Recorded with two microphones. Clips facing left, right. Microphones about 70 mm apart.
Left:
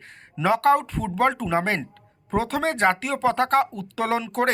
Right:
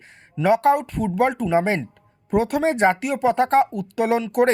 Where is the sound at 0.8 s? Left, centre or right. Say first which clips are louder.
Right 2 dB; centre.